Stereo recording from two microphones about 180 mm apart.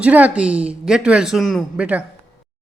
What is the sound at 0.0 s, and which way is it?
Speech, 10° right (ahead or behind).